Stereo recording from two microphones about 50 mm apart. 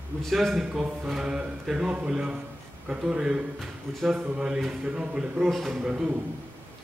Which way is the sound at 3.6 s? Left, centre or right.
Centre.